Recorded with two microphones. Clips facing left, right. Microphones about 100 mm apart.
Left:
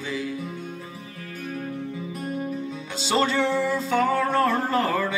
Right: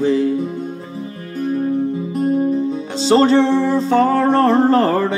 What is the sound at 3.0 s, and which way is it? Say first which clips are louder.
Music: right 10 dB; 35° right (ahead or behind).